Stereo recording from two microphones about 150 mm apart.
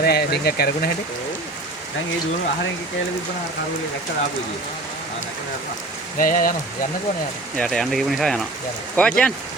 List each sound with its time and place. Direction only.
0.0 s speech: 90° left
6.1 s speech: 65° left (ahead or behind)
7.5 s speech: 5° left (ahead or behind)